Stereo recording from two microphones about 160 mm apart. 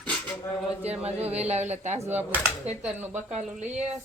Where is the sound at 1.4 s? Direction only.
45° right (ahead or behind).